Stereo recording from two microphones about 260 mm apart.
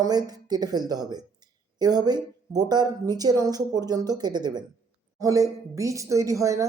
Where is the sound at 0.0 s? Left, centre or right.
Centre.